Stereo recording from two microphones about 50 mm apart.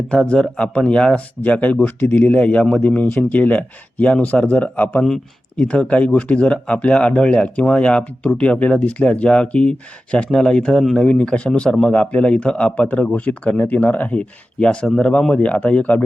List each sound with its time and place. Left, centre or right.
0.1 s speech: centre
1.4 s speech: left
1.8 s speech: left
2.3 s speech: left
2.8 s speech: left